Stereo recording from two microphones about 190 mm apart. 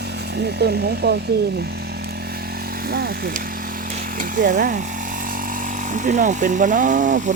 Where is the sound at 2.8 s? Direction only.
55° right (ahead or behind).